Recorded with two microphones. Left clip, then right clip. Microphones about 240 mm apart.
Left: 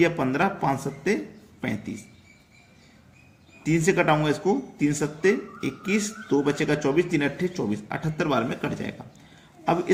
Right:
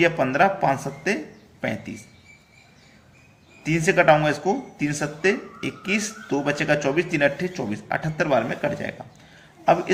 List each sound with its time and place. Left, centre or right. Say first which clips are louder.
0.0 s speech: right 4 dB; centre
3.6 s speech: right 3 dB; centre